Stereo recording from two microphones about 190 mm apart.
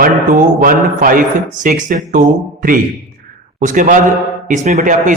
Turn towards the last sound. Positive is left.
turn(degrees=-45)  # may be behind; listen again after turning